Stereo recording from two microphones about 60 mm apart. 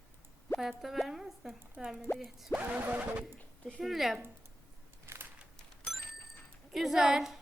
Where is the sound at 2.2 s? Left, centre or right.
Centre.